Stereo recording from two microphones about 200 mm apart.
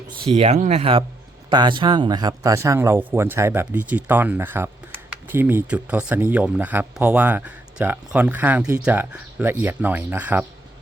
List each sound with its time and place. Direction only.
0.3 s speech: 30° right (ahead or behind); by 10.4 s 10° right (ahead or behind)